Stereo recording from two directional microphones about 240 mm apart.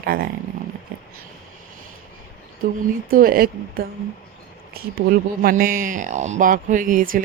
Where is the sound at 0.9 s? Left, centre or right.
Right.